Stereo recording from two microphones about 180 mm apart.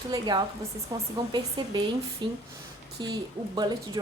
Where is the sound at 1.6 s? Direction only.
25° right (ahead or behind).